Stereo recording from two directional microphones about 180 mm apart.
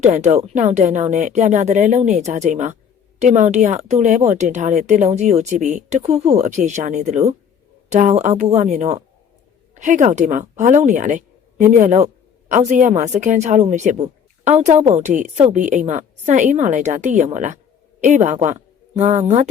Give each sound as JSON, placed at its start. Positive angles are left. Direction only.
{"t": 0.0, "sound": "speech", "side_deg": -40}